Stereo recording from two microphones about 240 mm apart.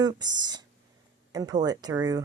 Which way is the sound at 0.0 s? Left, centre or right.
Centre.